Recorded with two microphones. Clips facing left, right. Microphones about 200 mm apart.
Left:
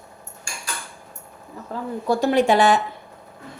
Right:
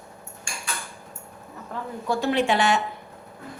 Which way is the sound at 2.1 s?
40° left (ahead or behind).